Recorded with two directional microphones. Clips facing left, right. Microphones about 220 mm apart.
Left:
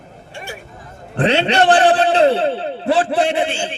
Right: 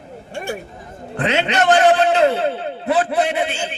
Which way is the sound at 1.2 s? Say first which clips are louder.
Left 4 dB; 30° left (ahead or behind).